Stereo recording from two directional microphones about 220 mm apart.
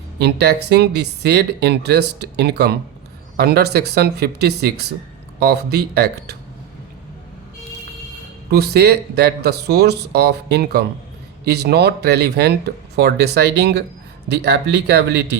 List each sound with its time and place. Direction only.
0.2 s speech: 50° right (ahead or behind)
8.4 s speech: 50° right (ahead or behind)